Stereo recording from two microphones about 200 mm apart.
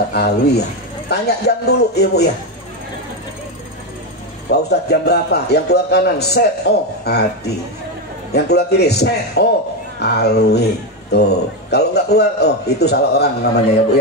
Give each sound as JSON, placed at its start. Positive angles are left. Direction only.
{"t": 0.1, "sound": "a man's voice", "side_deg": 55}
{"t": 4.5, "sound": "a man's voice", "side_deg": 55}